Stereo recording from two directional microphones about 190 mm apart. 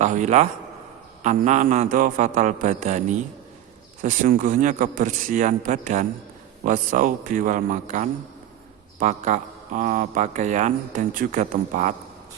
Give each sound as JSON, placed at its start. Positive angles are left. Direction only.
{"t": 0.0, "sound": "speech", "side_deg": -40}
{"t": 4.0, "sound": "a man's voice", "side_deg": -45}